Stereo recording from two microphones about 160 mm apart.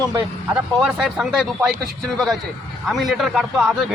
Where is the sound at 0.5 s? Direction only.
5° right (ahead or behind).